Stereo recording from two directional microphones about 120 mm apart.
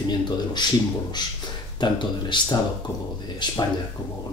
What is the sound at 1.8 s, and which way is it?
Speech, 40° left (ahead or behind).